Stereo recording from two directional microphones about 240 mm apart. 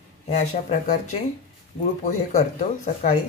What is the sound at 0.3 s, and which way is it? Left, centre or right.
Speech, left.